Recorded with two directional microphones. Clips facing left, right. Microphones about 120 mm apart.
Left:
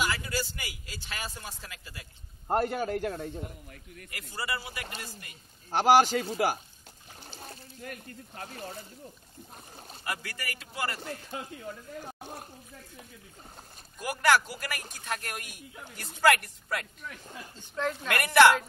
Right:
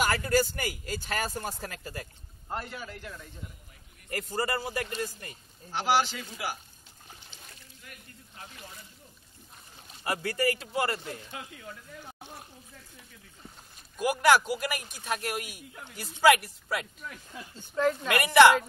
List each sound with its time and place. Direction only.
0.0 s speech: 50° right (ahead or behind)
2.4 s a man's voice: 50° left (ahead or behind)
4.1 s speech: 40° right (ahead or behind)
5.7 s a man's voice: 45° left (ahead or behind)
10.0 s a man's voice: 30° right (ahead or behind)
12.0 s speech: 45° left (ahead or behind)
13.9 s a man's voice: 15° right (ahead or behind)